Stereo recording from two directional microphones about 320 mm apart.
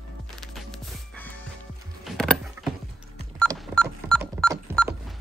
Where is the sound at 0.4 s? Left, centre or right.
Centre.